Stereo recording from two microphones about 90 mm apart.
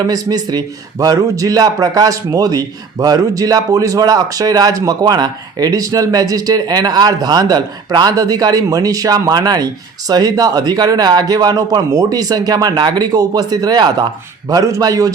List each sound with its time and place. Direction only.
0.0 s a man's voice: 45° right (ahead or behind)
14.5 s a man's voice: 40° right (ahead or behind)